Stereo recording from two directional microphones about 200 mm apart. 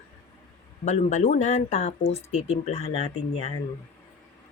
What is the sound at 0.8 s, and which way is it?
Speech, 35° left (ahead or behind).